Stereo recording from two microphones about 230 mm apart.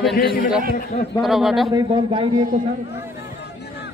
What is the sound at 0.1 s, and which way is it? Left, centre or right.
Speech, left.